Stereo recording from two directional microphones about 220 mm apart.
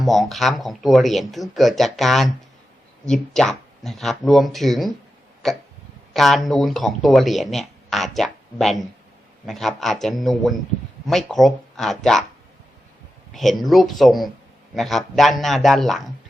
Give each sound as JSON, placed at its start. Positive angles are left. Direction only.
{"t": 0.0, "sound": "speech", "side_deg": 0}
{"t": 5.4, "sound": "hiccup", "side_deg": 0}
{"t": 6.1, "sound": "speech", "side_deg": 0}
{"t": 13.3, "sound": "speech", "side_deg": 0}